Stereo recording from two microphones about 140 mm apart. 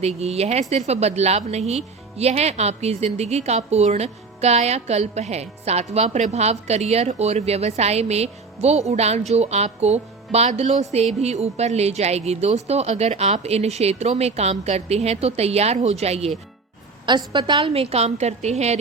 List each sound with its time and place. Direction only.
0.0 s a woman's voice: 50° right (ahead or behind)
17.1 s a woman's voice: 35° right (ahead or behind); by 18.8 s 50° right (ahead or behind)